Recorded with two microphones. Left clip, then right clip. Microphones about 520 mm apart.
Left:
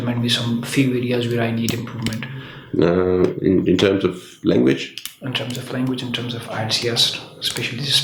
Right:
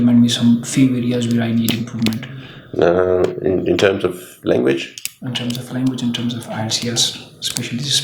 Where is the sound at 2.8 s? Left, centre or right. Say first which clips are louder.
Right 3 dB; right.